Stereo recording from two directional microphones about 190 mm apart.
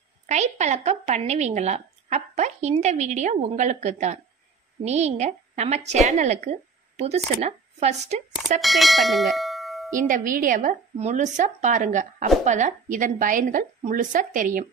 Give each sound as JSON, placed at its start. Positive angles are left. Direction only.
{"t": 0.3, "sound": "a woman's voice", "side_deg": -35}
{"t": 8.5, "sound": "speech", "side_deg": 0}
{"t": 10.0, "sound": "a woman's voice", "side_deg": -45}